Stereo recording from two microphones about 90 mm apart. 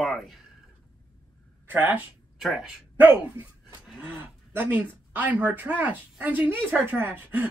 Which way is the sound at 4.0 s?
20° right (ahead or behind).